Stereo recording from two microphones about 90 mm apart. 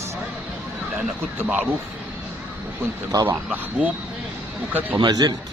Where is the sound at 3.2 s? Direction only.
20° right (ahead or behind).